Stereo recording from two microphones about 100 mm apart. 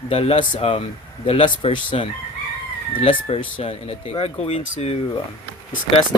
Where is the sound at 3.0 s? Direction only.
85° left.